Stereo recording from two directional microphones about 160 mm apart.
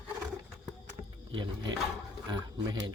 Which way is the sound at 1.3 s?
35° right (ahead or behind).